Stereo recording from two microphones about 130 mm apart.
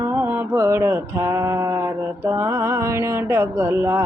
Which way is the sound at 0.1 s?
15° right (ahead or behind).